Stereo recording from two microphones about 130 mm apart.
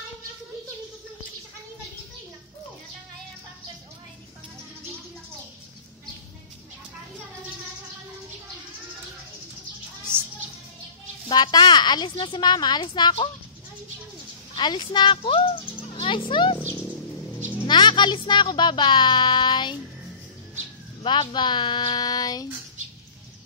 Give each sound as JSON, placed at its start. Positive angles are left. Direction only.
{"t": 11.2, "sound": "speech", "side_deg": 35}
{"t": 14.5, "sound": "speech", "side_deg": 35}
{"t": 17.6, "sound": "speech", "side_deg": 35}
{"t": 21.0, "sound": "speech", "side_deg": 35}